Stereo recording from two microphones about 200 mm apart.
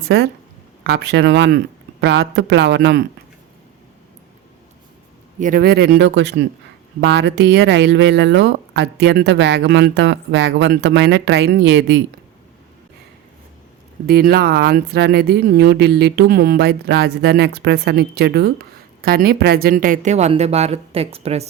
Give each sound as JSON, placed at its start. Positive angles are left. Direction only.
{"t": 0.1, "sound": "speech", "side_deg": -60}
{"t": 5.4, "sound": "speech", "side_deg": -45}
{"t": 14.1, "sound": "speech", "side_deg": -50}